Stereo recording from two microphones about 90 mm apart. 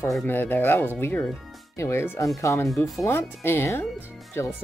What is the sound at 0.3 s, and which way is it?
Speech, 20° left (ahead or behind).